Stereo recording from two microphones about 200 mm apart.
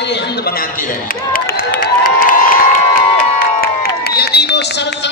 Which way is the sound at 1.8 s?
45° left (ahead or behind).